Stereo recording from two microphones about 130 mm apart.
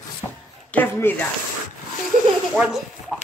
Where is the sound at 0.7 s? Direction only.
15° left (ahead or behind).